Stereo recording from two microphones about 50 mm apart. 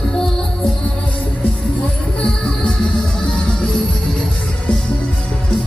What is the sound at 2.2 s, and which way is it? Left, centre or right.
Music, left.